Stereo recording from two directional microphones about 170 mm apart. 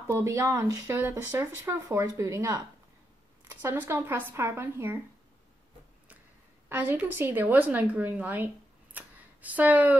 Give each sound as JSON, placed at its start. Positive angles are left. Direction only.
{"t": 0.0, "sound": "speech", "side_deg": -15}
{"t": 6.7, "sound": "speech", "side_deg": -10}
{"t": 8.9, "sound": "a sound", "side_deg": -10}